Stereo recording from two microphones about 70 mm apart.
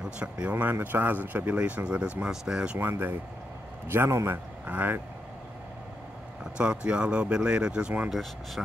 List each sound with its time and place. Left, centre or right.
0.2 s speech: centre
2.8 s a man's voice: right
4.6 s speech: right
6.6 s speech: centre